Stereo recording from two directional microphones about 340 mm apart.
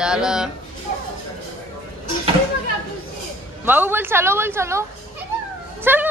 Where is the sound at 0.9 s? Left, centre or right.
Left.